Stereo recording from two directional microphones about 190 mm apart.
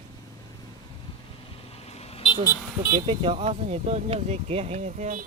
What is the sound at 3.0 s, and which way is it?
Speech, 30° right (ahead or behind).